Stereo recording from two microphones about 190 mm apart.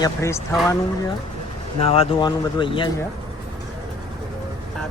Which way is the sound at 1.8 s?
30° left (ahead or behind).